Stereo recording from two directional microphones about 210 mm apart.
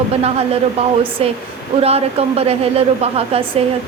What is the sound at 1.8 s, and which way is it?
A woman's voice, 30° right (ahead or behind).